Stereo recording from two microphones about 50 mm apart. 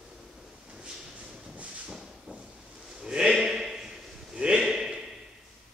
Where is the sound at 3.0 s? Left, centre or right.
Centre.